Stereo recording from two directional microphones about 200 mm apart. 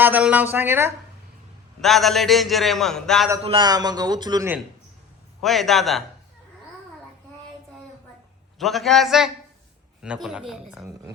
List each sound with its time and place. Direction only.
0.0 s speech: 5° right (ahead or behind)
1.8 s a man's voice: centre (ahead or behind)
3.4 s speech: 25° right (ahead or behind)
5.4 s a man's voice: centre (ahead or behind)
8.5 s a man's voice: centre (ahead or behind)